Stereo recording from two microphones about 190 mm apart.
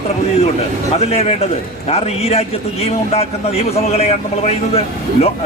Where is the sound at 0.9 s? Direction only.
35° left (ahead or behind).